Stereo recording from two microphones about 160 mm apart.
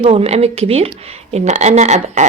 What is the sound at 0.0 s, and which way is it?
Speech, 40° right (ahead or behind).